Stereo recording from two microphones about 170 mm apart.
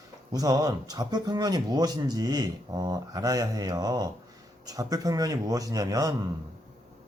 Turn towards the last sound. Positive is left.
turn(degrees=-20)  # may be behind; listen again after turning